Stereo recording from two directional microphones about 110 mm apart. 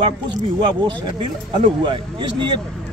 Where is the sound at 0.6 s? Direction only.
45° right (ahead or behind).